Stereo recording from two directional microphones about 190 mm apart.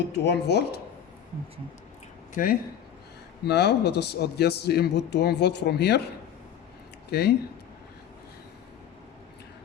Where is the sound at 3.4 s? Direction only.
60° left (ahead or behind).